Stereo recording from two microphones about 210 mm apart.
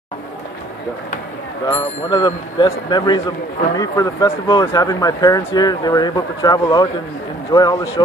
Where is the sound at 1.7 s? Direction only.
20° left (ahead or behind).